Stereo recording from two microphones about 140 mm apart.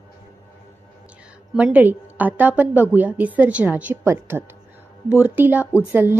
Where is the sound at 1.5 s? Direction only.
10° right (ahead or behind).